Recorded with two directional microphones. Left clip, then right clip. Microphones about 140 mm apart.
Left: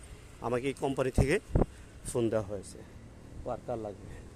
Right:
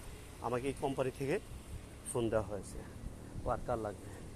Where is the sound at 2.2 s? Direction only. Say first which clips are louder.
Left 4 dB; 75° left (ahead or behind).